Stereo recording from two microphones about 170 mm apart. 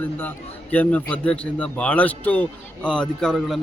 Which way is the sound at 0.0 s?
10° left (ahead or behind).